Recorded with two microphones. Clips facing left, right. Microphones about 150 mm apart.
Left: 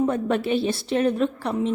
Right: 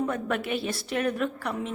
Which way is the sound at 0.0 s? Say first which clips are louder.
Left 6 dB; 30° left (ahead or behind).